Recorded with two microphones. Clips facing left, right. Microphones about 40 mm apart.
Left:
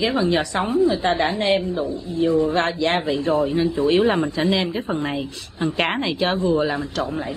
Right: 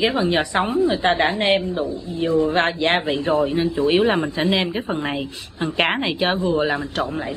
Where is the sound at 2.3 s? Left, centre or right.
Centre.